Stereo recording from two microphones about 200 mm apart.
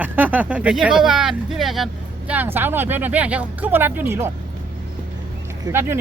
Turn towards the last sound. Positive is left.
turn(degrees=-10)  # may be behind; listen again after turning